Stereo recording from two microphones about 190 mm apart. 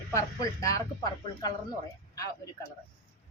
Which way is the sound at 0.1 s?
15° left (ahead or behind).